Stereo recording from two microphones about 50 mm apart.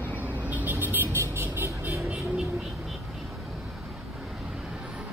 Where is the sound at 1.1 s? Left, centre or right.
Right.